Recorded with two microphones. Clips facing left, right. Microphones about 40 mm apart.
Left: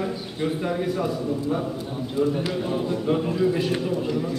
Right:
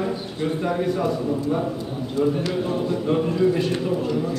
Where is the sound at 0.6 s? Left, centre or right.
Centre.